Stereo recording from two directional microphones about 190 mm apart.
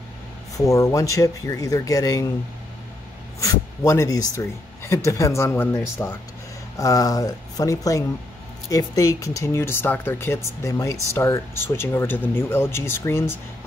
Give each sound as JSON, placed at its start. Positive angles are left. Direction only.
{"t": 0.6, "sound": "speech", "side_deg": 15}
{"t": 3.3, "sound": "speech", "side_deg": 15}